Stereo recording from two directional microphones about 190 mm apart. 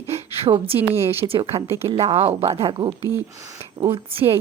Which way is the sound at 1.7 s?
15° right (ahead or behind).